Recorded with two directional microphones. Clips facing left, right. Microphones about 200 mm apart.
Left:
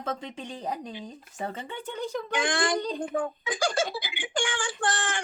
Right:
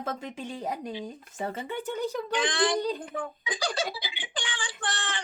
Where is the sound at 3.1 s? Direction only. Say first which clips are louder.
Left 5 dB; 45° left (ahead or behind).